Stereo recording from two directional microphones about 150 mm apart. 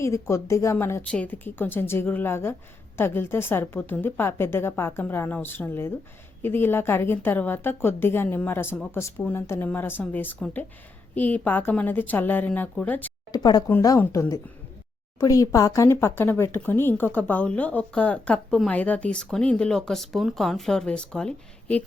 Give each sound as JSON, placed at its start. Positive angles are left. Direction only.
{"t": 0.0, "sound": "speech", "side_deg": 20}
{"t": 13.3, "sound": "a woman's voice", "side_deg": 25}